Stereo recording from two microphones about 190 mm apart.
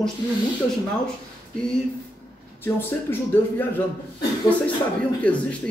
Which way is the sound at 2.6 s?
10° left (ahead or behind).